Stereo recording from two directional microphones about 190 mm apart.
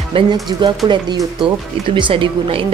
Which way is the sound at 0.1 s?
25° right (ahead or behind).